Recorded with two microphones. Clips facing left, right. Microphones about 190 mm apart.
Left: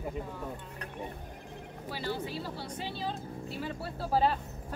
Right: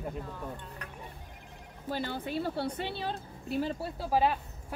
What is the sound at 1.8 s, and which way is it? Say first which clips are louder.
Speech: right 2 dB; 50° right (ahead or behind).